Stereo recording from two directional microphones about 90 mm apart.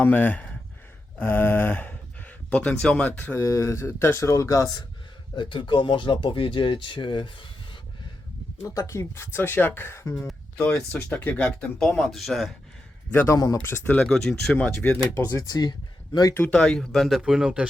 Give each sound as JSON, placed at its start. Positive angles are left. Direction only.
{"t": 0.0, "sound": "speech", "side_deg": 15}
{"t": 3.4, "sound": "speech", "side_deg": 35}
{"t": 5.4, "sound": "speech", "side_deg": 65}
{"t": 8.6, "sound": "speech", "side_deg": 35}
{"t": 10.6, "sound": "speech", "side_deg": 10}
{"t": 11.8, "sound": "speech", "side_deg": 5}
{"t": 13.1, "sound": "a man's voice", "side_deg": 25}
{"t": 13.3, "sound": "speech", "side_deg": 40}
{"t": 13.7, "sound": "speech", "side_deg": 15}
{"t": 15.1, "sound": "speech", "side_deg": 25}
{"t": 15.4, "sound": "speech", "side_deg": 40}
{"t": 16.5, "sound": "speech", "side_deg": 10}